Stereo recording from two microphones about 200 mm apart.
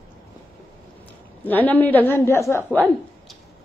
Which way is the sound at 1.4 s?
10° left (ahead or behind).